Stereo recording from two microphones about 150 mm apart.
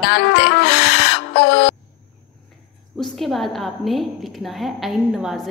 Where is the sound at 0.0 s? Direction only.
90° left.